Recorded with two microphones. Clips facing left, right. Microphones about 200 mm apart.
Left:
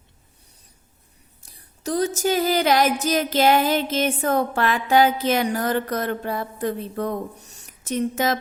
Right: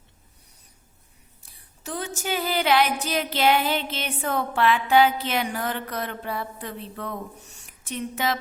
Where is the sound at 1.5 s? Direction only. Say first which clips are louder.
Left 8 dB; 40° left (ahead or behind).